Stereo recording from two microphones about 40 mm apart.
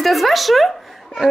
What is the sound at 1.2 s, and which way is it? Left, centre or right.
Speech, centre.